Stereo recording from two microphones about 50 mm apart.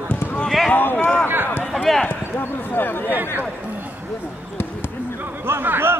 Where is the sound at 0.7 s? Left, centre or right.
Left.